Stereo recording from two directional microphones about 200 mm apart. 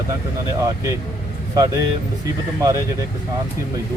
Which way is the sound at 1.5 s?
15° right (ahead or behind).